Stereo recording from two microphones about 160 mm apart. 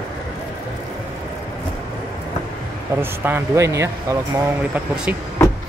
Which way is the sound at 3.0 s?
15° right (ahead or behind).